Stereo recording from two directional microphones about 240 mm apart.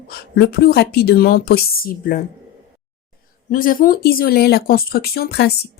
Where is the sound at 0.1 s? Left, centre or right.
Left.